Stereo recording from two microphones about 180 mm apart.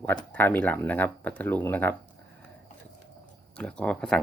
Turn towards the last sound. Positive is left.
turn(degrees=5)  # may be behind; listen again after turning